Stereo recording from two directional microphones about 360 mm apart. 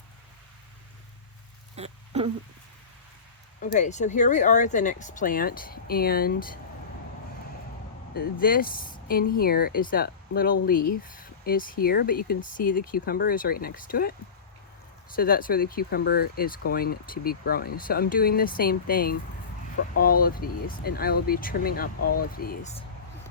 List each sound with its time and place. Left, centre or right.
1.7 s a sound: centre
3.6 s speech: centre
8.1 s speech: left